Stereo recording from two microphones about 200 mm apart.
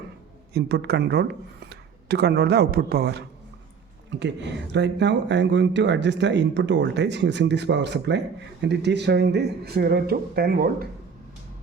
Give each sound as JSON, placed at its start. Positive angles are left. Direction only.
{"t": 0.5, "sound": "speech", "side_deg": -55}